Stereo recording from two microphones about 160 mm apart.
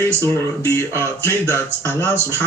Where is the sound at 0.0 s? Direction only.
15° left (ahead or behind).